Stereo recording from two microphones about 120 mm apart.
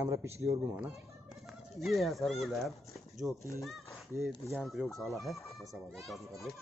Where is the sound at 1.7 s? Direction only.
Centre (ahead or behind).